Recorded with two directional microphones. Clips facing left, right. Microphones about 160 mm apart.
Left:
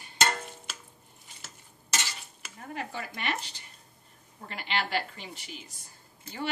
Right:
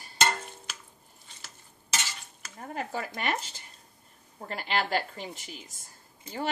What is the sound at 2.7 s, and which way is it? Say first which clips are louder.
A woman's voice: right 3 dB; 40° right (ahead or behind).